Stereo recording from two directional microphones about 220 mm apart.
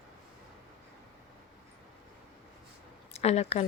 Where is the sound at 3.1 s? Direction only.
30° left (ahead or behind).